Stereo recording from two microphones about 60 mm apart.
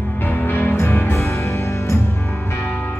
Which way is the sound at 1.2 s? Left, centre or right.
Left.